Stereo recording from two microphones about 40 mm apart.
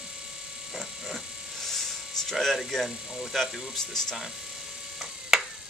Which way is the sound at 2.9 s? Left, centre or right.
Centre.